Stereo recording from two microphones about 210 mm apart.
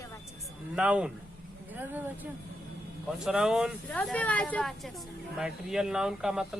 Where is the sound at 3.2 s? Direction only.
5° right (ahead or behind).